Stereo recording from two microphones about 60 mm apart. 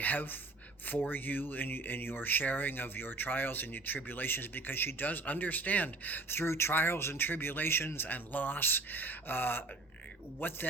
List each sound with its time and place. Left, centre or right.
0.0 s speech: left